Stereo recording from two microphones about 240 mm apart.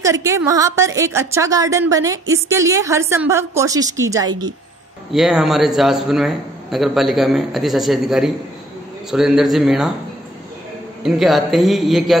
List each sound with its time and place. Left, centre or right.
0.0 s a woman's voice: centre
5.1 s a man's voice: centre
11.0 s a man's voice: centre